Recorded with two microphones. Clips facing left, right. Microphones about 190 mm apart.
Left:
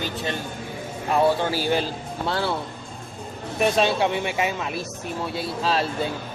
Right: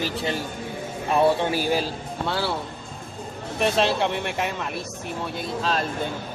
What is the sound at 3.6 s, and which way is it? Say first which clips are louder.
Speech: left 1 dB; centre (ahead or behind).